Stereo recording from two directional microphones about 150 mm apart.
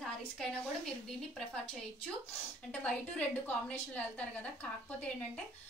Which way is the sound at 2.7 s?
10° left (ahead or behind).